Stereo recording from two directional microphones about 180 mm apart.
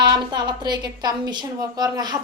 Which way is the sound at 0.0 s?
25° right (ahead or behind).